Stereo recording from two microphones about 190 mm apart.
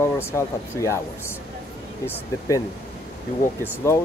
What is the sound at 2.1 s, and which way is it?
Speech, 15° left (ahead or behind).